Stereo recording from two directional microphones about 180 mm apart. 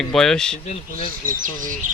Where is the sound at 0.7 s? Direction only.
35° left (ahead or behind).